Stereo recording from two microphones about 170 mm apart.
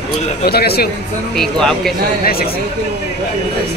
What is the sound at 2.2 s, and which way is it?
Speech, 60° left (ahead or behind).